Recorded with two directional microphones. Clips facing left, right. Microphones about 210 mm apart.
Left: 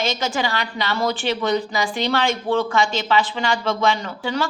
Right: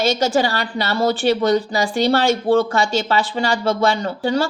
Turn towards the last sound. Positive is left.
turn(degrees=-35)  # may be behind; listen again after turning